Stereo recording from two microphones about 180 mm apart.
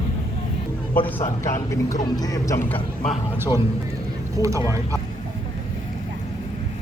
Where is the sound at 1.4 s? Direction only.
15° left (ahead or behind).